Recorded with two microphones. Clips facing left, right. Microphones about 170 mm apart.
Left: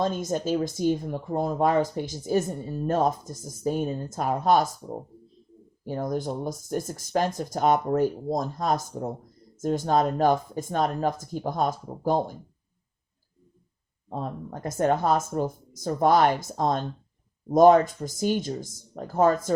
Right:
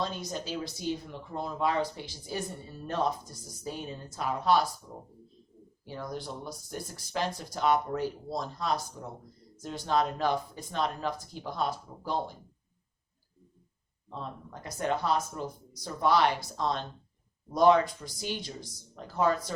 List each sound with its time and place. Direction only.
0.0 s speech: 45° left (ahead or behind)
14.1 s speech: 50° left (ahead or behind)